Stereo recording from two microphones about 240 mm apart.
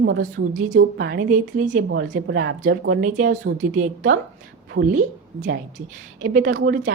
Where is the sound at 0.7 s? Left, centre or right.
Right.